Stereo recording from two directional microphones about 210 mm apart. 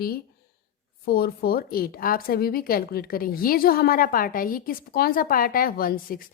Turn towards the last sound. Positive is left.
turn(degrees=45)  # may be behind; listen again after turning